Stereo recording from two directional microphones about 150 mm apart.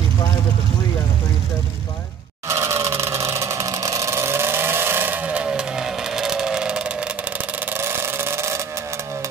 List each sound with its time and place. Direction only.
2.4 s vehicle: 20° right (ahead or behind)